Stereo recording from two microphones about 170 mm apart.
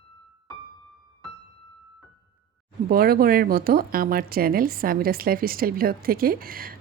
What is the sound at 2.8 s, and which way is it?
Speech, 60° right (ahead or behind).